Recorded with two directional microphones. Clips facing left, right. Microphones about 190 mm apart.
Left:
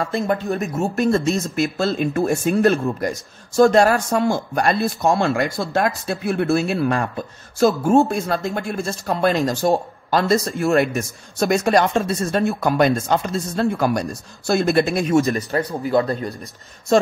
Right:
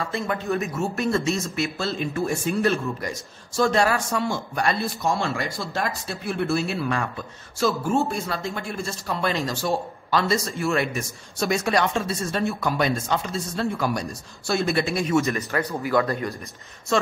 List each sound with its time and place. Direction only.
0.0 s speech: 40° left (ahead or behind)
15.2 s speech: 30° left (ahead or behind)